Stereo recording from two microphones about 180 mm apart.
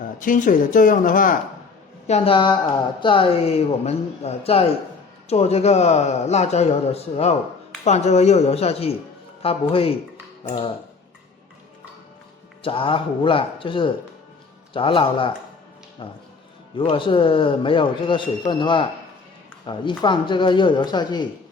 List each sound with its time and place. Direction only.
0.0 s speech: 50° left (ahead or behind)
2.0 s speech: 35° left (ahead or behind)
12.6 s a man's voice: 30° left (ahead or behind)